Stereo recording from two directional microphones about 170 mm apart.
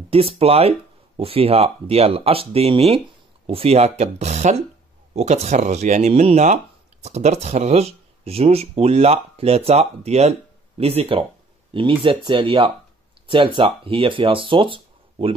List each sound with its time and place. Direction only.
0.1 s speech: 35° right (ahead or behind)